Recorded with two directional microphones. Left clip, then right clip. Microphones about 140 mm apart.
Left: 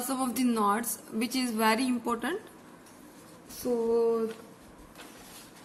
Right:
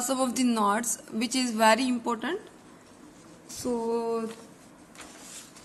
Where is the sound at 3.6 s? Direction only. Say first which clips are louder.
Left 1 dB; 25° right (ahead or behind).